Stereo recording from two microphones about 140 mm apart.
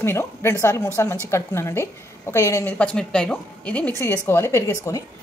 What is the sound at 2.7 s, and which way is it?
Speech, 5° left (ahead or behind).